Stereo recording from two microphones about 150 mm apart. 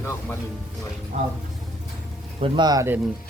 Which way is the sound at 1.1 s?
50° right (ahead or behind).